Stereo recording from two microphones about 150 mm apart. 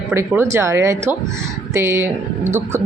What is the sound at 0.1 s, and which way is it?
Speech, 15° right (ahead or behind).